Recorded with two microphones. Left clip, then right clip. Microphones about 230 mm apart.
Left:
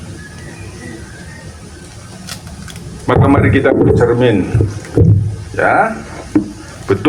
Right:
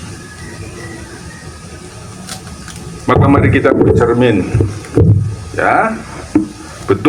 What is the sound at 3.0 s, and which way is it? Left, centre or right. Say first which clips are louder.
A man's voice: right 1 dB; right.